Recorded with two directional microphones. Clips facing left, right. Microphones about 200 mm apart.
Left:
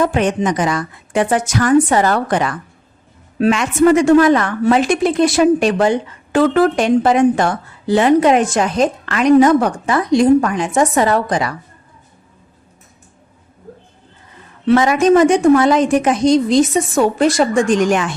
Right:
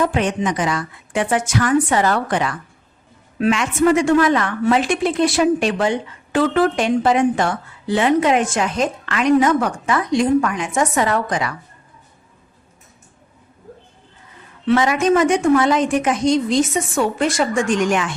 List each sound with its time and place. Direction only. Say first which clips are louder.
0.0 s a woman's voice: left 3 dB; 45° left (ahead or behind)
14.7 s a woman's voice: left 4 dB; 40° left (ahead or behind)